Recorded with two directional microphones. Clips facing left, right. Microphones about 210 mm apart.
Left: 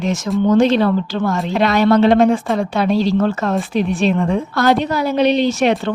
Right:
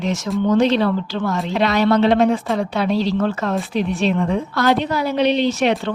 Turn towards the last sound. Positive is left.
turn(degrees=45)  # may be behind; listen again after turning